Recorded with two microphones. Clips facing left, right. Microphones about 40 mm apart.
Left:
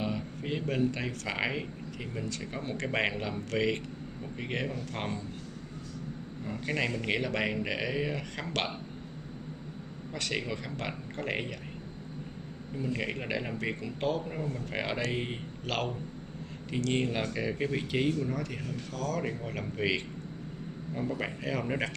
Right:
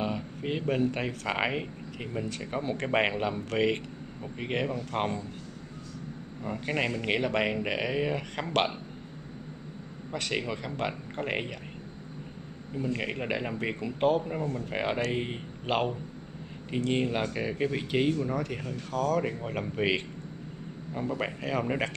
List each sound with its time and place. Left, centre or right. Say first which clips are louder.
0.4 s a man's voice: right 3 dB; right
6.4 s speech: right 2 dB; right
10.1 s speech: right 2 dB; right
11.1 s speech: right 1 dB; centre
12.7 s a man's voice: right 2 dB; centre
15.6 s a man's voice: right 5 dB; right
16.9 s a man's voice: right 2 dB; centre
18.8 s speech: right 7 dB; right
20.9 s a man's voice: right 2 dB; centre